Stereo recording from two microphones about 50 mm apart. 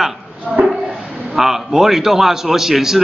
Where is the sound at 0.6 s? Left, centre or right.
Right.